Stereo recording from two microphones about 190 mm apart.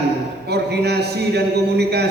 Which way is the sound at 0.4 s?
60° right (ahead or behind).